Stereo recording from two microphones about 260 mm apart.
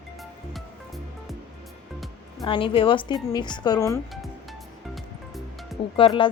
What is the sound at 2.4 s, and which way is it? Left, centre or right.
A woman's voice, centre.